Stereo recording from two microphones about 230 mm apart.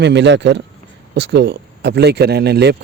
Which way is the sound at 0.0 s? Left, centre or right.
Right.